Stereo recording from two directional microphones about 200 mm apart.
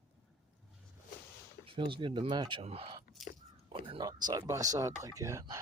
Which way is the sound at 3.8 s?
20° right (ahead or behind).